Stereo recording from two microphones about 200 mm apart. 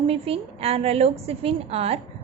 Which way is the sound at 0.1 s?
30° right (ahead or behind).